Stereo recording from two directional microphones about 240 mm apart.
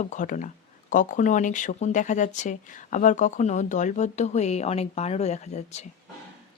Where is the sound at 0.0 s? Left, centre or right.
Left.